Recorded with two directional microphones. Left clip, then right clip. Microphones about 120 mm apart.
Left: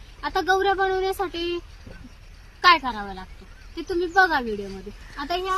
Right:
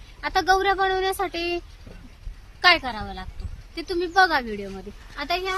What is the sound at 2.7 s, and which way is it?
Speech, 25° right (ahead or behind).